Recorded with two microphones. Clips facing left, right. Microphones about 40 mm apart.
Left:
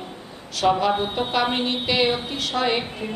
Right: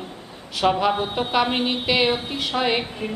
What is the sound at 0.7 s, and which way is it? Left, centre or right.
A woman's voice, centre.